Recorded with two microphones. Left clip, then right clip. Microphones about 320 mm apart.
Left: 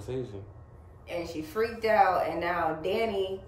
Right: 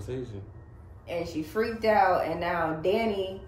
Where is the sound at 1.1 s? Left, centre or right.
Centre.